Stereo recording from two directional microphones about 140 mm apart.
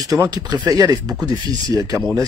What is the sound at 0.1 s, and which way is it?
Speech, 25° right (ahead or behind).